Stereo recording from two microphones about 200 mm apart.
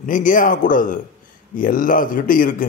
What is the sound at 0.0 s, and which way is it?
Speech, 40° left (ahead or behind).